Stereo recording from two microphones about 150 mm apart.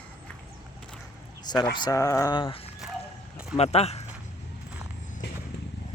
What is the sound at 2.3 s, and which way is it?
Speech, 35° left (ahead or behind).